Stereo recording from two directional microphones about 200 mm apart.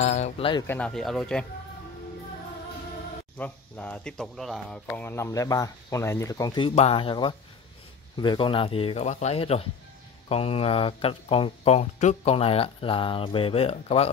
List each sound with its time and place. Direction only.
0.0 s speech: 35° left (ahead or behind)
0.7 s speech: 5° left (ahead or behind)
3.3 s speech: 5° left (ahead or behind); by 14.1 s 30° left (ahead or behind)